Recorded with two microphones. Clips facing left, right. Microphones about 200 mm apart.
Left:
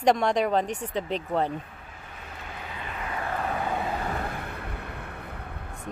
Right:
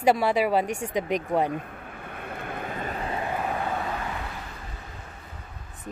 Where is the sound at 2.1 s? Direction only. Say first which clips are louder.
Right 7 dB; 55° right (ahead or behind); by 3.2 s 35° right (ahead or behind).